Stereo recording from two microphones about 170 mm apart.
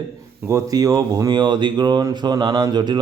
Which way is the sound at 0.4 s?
20° right (ahead or behind).